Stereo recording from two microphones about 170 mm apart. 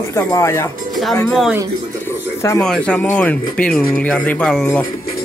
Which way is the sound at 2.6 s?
5° left (ahead or behind).